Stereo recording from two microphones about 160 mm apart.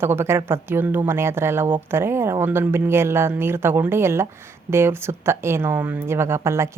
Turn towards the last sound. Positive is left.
turn(degrees=-15)  # may be behind; listen again after turning